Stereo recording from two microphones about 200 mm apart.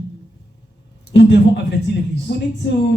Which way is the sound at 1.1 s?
60° left (ahead or behind).